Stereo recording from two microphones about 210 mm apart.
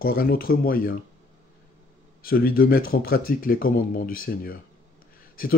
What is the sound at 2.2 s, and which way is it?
Speech, 45° left (ahead or behind).